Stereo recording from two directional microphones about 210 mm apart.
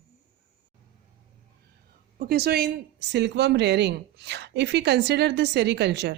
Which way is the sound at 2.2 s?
50° right (ahead or behind).